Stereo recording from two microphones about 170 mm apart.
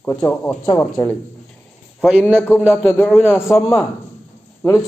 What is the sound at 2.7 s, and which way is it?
Speech, 10° left (ahead or behind).